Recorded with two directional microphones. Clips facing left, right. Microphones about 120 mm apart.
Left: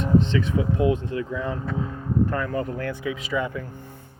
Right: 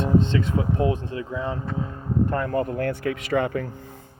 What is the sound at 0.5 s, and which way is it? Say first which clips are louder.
Speech: left 1 dB; 35° right (ahead or behind).